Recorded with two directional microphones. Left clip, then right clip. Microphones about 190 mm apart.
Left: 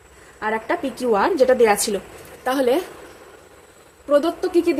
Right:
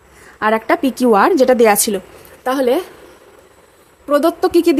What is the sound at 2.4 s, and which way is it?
Speech, 25° right (ahead or behind).